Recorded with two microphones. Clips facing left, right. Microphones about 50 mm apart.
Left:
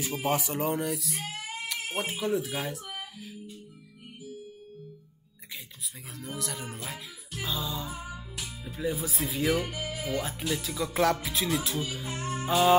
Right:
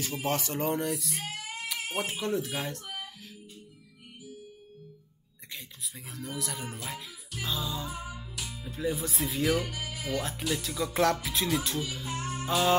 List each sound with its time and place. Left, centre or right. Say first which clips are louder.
0.0 s music: left 2 dB; centre
1.3 s music: left 1 dB; left
2.0 s music: left 2 dB; centre
6.1 s music: even; centre
8.0 s music: even; left
8.6 s music: even; centre
9.7 s speech: left 2 dB; left
10.5 s music: even; centre
12.0 s music: left 1 dB; left
12.4 s music: left 3 dB; centre